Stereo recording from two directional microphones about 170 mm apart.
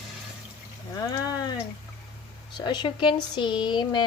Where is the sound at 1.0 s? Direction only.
20° left (ahead or behind).